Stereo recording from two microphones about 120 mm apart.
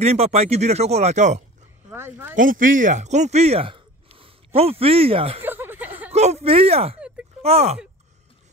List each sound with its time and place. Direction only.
0.0 s speech: 60° right (ahead or behind)
1.9 s speech: 20° right (ahead or behind)
2.3 s speech: 90° right; by 5.4 s 50° right (ahead or behind)
5.4 s a sound: 15° right (ahead or behind)
6.1 s speech: 65° right (ahead or behind)